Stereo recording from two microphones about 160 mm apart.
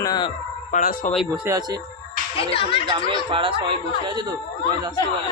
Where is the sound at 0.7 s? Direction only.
60° left (ahead or behind).